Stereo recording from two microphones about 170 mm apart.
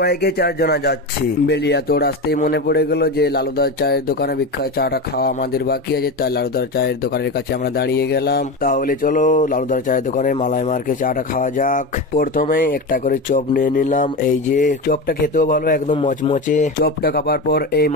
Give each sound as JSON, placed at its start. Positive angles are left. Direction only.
{"t": 0.0, "sound": "a man's voice", "side_deg": 70}
{"t": 7.8, "sound": "a sound", "side_deg": 75}
{"t": 16.4, "sound": "speech", "side_deg": 55}